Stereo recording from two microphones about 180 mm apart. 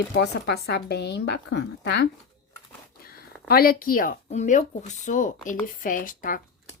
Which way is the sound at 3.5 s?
55° left (ahead or behind).